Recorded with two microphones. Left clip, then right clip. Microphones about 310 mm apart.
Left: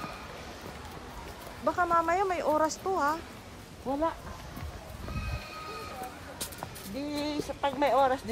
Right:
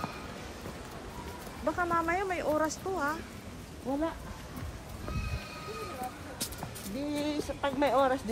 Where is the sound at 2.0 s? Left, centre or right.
Centre.